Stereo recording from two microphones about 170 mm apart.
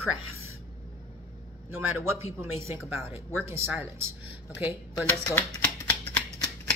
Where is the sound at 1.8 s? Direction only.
15° right (ahead or behind).